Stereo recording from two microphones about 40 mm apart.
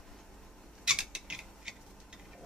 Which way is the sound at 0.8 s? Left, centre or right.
Centre.